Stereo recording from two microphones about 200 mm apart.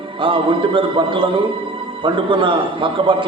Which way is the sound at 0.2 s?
25° right (ahead or behind).